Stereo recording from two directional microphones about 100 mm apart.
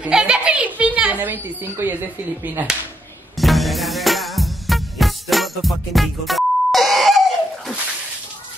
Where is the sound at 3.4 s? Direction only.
Centre (ahead or behind).